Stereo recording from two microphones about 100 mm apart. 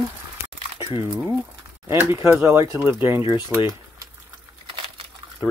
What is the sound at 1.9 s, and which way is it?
Speech, 25° right (ahead or behind).